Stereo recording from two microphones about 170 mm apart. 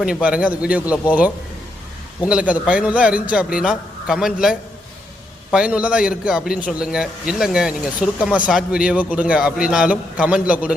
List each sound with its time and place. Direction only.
0.0 s a man's voice: 5° right (ahead or behind)